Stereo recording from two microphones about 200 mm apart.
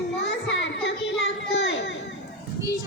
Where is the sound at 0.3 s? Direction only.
65° left (ahead or behind).